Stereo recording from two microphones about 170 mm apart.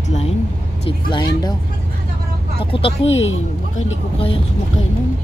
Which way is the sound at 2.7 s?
35° left (ahead or behind).